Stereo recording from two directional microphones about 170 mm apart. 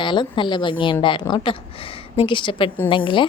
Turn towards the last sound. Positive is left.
turn(degrees=30)  # may be behind; listen again after turning